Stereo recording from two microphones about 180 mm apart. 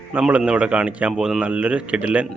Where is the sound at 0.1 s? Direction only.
5° right (ahead or behind).